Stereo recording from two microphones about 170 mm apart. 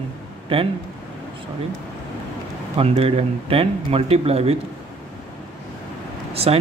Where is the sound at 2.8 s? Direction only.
35° right (ahead or behind).